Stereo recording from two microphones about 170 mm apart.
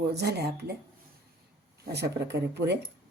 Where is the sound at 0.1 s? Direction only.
75° right (ahead or behind).